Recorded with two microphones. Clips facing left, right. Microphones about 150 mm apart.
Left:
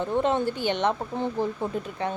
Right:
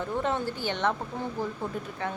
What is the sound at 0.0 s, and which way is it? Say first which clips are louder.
A woman's voice: left 5 dB; 20° left (ahead or behind).